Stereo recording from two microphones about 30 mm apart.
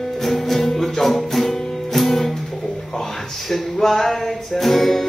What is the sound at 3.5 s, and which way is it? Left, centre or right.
Music, centre.